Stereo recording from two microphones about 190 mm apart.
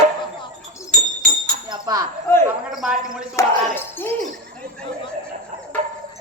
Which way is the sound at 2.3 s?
15° left (ahead or behind).